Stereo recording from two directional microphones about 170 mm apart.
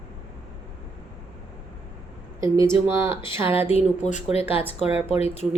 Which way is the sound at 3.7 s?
45° left (ahead or behind).